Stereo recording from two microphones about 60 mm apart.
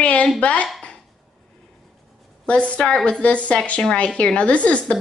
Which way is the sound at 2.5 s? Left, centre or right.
Left.